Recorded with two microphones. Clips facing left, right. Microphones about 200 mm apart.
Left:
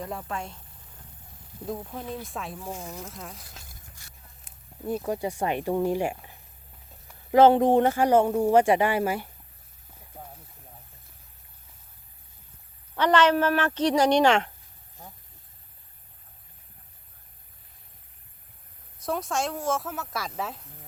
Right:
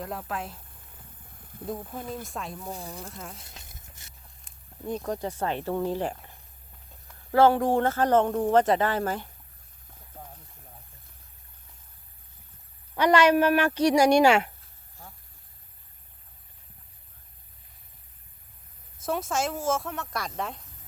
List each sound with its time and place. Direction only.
0.0 s speech: centre (ahead or behind)
1.6 s speech: centre (ahead or behind)
3.6 s a sound: 20° right (ahead or behind)
4.4 s speech: 5° left (ahead or behind)
10.2 s a sound: 10° left (ahead or behind)
13.0 s speech: 10° right (ahead or behind)
15.0 s vehicle: 20° left (ahead or behind)
18.9 s speech: centre (ahead or behind)